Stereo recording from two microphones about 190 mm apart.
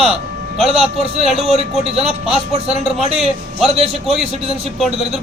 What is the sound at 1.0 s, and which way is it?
Speech, 30° right (ahead or behind).